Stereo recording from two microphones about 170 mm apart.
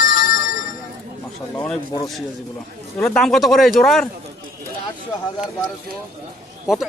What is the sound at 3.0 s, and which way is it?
Speech, centre (ahead or behind).